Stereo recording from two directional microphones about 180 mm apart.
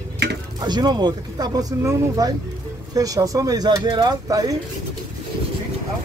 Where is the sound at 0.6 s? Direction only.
25° right (ahead or behind).